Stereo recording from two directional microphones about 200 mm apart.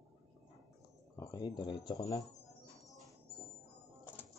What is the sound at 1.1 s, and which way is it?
Speech, 20° left (ahead or behind).